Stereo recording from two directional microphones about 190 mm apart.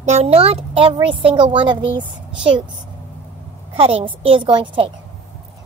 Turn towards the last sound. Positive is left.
turn(degrees=-25)  # may be behind; listen again after turning